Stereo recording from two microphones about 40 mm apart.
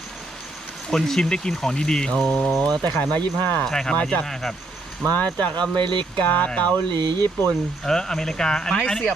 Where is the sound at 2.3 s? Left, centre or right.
Left.